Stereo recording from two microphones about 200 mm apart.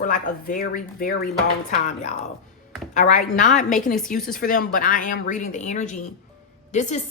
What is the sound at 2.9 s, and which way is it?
A woman's voice, 40° left (ahead or behind).